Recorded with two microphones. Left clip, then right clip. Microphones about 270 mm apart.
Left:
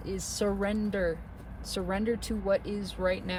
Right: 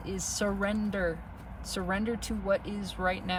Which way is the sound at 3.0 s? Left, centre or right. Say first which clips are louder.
Even; centre.